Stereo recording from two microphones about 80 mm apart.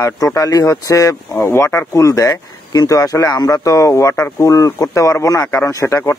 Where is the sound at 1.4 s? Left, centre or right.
Left.